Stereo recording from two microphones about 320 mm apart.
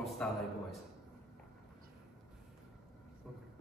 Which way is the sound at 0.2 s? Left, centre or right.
Centre.